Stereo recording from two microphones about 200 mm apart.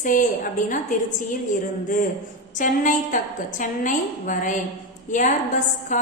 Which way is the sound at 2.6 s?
40° left (ahead or behind).